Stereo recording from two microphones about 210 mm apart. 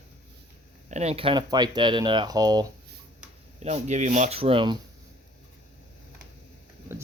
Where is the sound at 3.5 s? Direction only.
30° right (ahead or behind).